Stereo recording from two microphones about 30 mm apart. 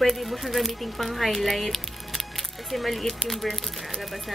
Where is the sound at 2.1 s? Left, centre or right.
Centre.